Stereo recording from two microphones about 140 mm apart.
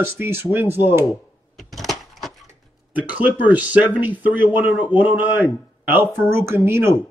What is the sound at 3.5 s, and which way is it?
A man's voice, 10° right (ahead or behind).